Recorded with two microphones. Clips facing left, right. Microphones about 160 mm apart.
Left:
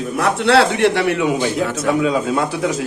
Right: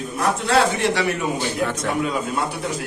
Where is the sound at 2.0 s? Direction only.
90° left.